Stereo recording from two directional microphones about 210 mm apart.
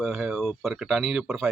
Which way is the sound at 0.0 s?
Centre (ahead or behind).